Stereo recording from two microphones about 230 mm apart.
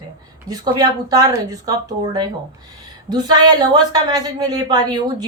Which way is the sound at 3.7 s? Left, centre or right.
Centre.